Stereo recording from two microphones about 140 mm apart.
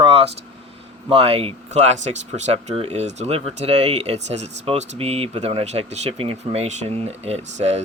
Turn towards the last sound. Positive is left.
turn(degrees=-50)  # may be behind; listen again after turning